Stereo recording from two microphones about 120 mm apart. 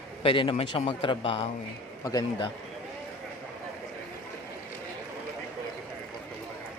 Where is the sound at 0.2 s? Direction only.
45° left (ahead or behind).